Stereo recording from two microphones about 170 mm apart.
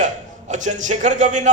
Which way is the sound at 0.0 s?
45° right (ahead or behind).